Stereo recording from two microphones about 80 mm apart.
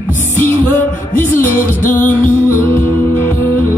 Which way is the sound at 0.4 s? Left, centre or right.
Left.